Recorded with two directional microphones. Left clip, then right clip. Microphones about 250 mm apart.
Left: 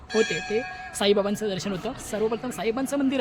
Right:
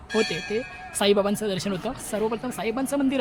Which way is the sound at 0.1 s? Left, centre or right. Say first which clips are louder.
Left 1 dB; centre.